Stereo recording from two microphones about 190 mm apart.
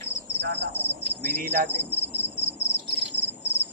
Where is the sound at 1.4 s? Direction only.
55° right (ahead or behind).